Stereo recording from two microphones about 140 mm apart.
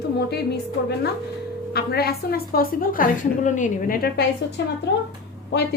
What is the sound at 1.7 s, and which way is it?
A woman's voice, 90° left.